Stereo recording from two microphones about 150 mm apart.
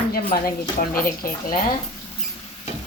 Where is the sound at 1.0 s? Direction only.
70° left (ahead or behind).